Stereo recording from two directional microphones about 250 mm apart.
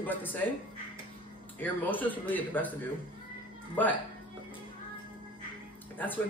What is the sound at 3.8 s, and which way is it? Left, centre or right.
Speech, centre.